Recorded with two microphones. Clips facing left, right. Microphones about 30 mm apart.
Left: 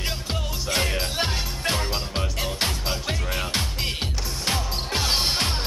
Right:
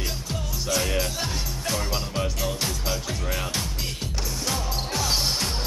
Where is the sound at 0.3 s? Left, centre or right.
Left.